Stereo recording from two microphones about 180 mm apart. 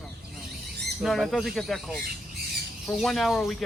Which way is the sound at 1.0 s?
Centre (ahead or behind).